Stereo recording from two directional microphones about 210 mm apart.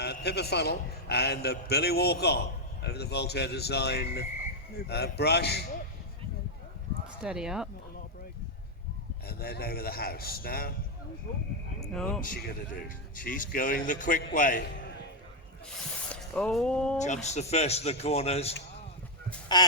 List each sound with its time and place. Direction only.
0.0 s a man's voice: 50° left (ahead or behind)
7.2 s speech: 5° right (ahead or behind)
9.2 s a man's voice: 50° left (ahead or behind)
11.9 s speech: 5° left (ahead or behind)
12.2 s speech: 45° left (ahead or behind)
16.0 s speech: 5° left (ahead or behind)
17.0 s speech: 35° left (ahead or behind)